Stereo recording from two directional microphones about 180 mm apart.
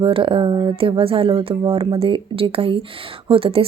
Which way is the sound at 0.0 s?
30° right (ahead or behind).